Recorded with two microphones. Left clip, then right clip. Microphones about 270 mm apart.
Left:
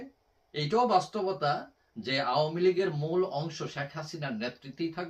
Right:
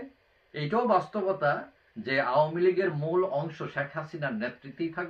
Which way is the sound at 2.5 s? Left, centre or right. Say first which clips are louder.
Right 1 dB; centre.